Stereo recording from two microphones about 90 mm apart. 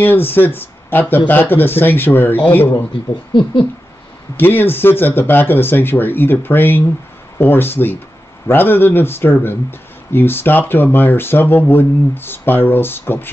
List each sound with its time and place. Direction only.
0.0 s speech: 20° left (ahead or behind)
3.3 s owl: 65° left (ahead or behind)
4.4 s speech: 25° left (ahead or behind)